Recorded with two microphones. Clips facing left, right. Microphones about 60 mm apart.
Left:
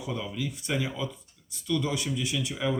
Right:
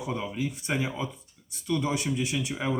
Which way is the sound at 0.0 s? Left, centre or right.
Right.